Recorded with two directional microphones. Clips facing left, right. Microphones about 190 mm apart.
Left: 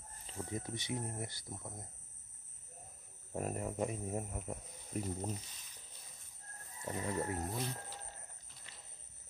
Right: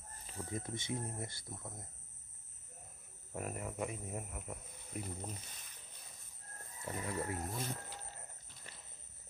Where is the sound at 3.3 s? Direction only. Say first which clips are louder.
Left 4 dB; 35° left (ahead or behind).